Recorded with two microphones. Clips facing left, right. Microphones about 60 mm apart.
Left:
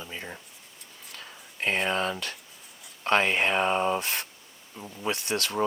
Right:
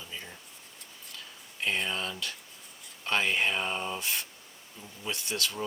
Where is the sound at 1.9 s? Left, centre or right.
Left.